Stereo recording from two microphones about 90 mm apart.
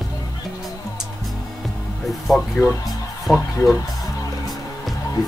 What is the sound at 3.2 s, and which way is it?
Speech, 5° right (ahead or behind).